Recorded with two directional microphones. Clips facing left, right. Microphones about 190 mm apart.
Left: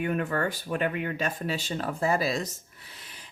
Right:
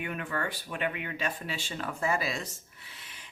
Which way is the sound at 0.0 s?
40° left (ahead or behind).